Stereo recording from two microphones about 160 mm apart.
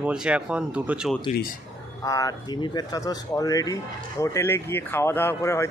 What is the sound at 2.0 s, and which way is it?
Speech, 20° left (ahead or behind).